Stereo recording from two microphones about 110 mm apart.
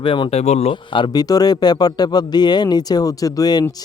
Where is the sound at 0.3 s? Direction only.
80° left.